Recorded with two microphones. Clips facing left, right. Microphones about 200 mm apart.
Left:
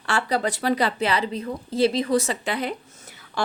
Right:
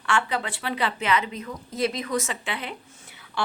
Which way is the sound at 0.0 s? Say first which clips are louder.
Left 3 dB; 35° left (ahead or behind).